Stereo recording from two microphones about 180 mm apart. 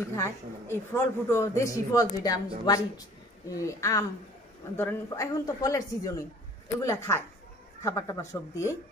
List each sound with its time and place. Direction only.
0.1 s a woman's voice: 15° left (ahead or behind)